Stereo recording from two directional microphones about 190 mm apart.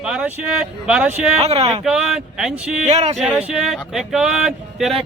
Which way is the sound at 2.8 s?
35° right (ahead or behind).